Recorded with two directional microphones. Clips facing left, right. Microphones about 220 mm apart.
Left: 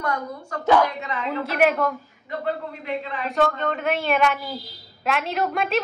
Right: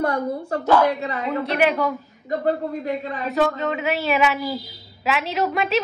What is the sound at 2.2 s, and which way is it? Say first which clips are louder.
Speech: right 5 dB; 40° right (ahead or behind).